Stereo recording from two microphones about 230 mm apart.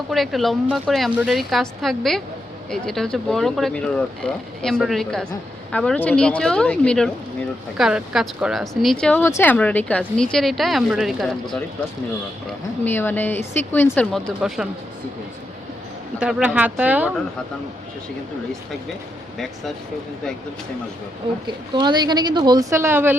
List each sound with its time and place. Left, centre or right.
0.1 s speech: centre
12.8 s a woman's voice: centre
16.2 s speech: centre
21.4 s a woman's voice: centre